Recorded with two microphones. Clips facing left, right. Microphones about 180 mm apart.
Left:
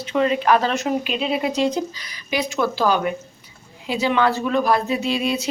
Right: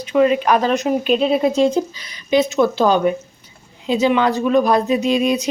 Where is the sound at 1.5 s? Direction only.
50° right (ahead or behind).